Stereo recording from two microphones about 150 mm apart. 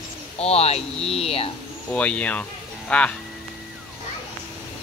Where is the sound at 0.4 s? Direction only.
45° left (ahead or behind).